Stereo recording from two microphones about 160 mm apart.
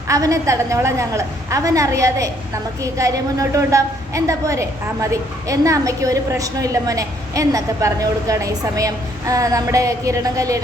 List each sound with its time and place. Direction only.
0.1 s a woman's voice: 20° right (ahead or behind)